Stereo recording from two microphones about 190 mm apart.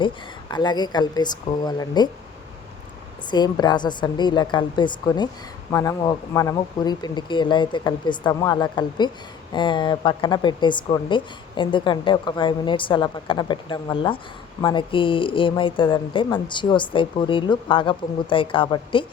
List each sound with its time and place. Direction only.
0.5 s a woman's voice: 20° left (ahead or behind)
3.2 s a woman's voice: 20° left (ahead or behind)